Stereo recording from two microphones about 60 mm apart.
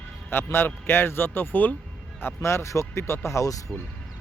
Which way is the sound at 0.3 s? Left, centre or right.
Left.